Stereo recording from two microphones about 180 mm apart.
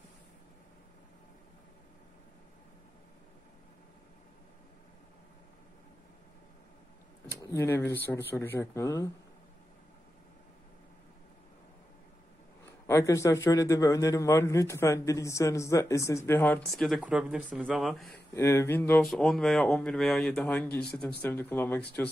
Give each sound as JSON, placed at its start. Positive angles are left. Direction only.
{"t": 7.2, "sound": "a man's voice", "side_deg": 15}
{"t": 12.8, "sound": "a man's voice", "side_deg": 15}
{"t": 18.3, "sound": "a man's voice", "side_deg": 15}